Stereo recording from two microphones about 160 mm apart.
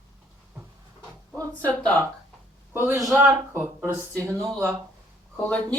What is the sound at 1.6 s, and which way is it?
Speech, 10° left (ahead or behind).